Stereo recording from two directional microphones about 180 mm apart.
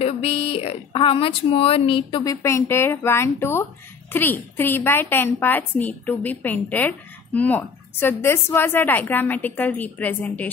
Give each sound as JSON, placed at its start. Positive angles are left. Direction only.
{"t": 0.0, "sound": "a woman's voice", "side_deg": 30}